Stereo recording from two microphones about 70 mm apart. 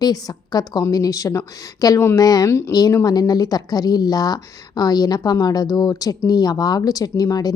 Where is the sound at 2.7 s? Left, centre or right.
Left.